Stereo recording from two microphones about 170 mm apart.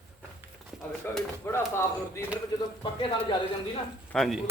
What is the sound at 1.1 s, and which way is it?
Speech, 10° left (ahead or behind).